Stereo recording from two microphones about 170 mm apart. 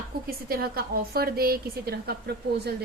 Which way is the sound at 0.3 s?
60° right (ahead or behind).